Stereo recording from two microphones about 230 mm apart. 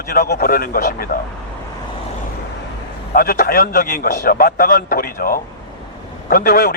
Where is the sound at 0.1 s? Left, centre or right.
Left.